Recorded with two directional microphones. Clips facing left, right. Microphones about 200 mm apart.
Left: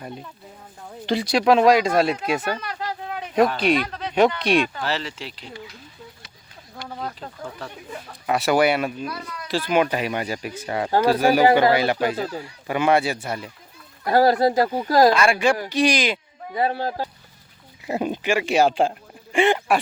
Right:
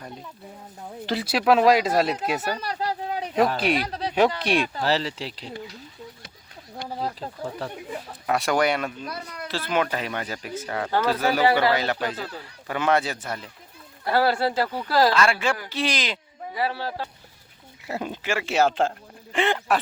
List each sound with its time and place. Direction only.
1.0 s speech: 5° right (ahead or behind)
2.6 s a sound: 35° right (ahead or behind)
3.8 s speech: 35° right (ahead or behind)
6.8 s speech: 35° right (ahead or behind)
8.3 s speech: 5° left (ahead or behind)
14.1 s speech: 40° left (ahead or behind)
14.5 s speech: 15° left (ahead or behind)
16.6 s speech: 45° left (ahead or behind)
17.8 s speech: 15° left (ahead or behind)